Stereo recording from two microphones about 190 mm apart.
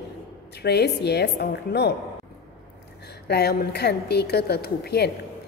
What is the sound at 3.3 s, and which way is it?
A woman's voice, 55° left (ahead or behind).